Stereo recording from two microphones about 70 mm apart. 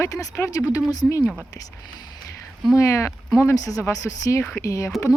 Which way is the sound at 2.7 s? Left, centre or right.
Left.